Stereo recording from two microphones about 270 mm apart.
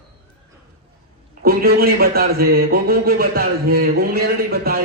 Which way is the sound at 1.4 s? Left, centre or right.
Right.